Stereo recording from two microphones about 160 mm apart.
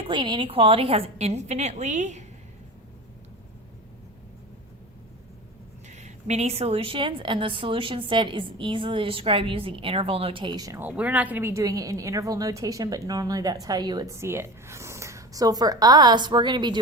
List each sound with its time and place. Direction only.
0.1 s a woman's voice: 30° right (ahead or behind); by 2.2 s 45° right (ahead or behind)
5.9 s a woman's voice: 45° right (ahead or behind); by 10.8 s 25° right (ahead or behind)
10.8 s a woman's voice: 10° right (ahead or behind); by 16.7 s 30° right (ahead or behind)